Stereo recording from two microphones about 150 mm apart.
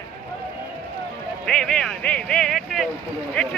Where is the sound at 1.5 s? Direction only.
5° left (ahead or behind).